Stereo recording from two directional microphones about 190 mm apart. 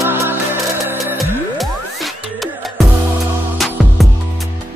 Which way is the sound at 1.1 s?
Centre (ahead or behind).